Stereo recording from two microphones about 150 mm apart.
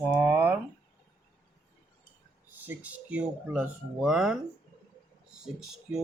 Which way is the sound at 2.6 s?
10° right (ahead or behind).